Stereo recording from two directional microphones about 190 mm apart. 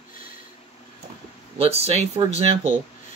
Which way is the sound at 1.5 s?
30° right (ahead or behind).